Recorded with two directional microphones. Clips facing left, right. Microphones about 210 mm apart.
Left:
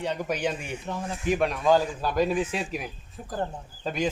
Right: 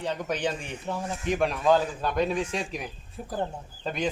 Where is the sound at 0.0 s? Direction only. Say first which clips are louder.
Left 1 dB; 10° left (ahead or behind).